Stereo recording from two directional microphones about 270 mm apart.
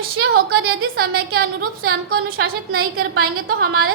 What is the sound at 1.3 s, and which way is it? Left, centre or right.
A woman's voice, right.